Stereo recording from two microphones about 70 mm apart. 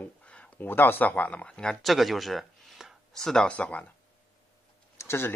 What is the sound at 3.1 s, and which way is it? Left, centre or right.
Speech, centre.